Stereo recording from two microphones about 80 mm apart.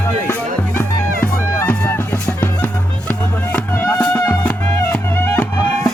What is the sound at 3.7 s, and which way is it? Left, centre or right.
Music, left.